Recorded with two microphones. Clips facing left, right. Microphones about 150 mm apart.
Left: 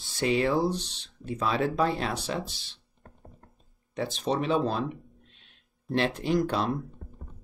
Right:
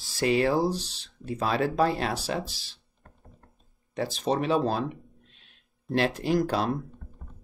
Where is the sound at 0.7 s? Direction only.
5° right (ahead or behind).